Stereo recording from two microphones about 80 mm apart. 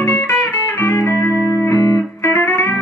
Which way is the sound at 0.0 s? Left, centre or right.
Left.